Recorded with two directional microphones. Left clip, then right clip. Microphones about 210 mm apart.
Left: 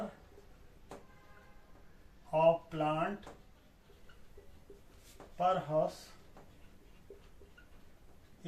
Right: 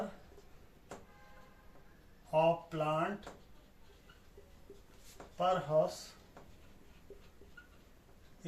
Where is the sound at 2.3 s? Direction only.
Centre (ahead or behind).